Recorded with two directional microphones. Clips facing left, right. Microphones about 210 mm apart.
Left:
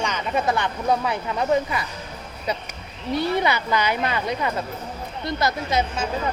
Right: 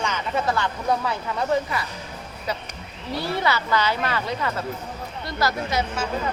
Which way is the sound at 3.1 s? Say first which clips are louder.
Left 3 dB; 20° left (ahead or behind).